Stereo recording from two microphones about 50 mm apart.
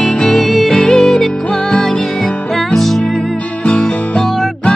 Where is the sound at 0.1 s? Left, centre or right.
Centre.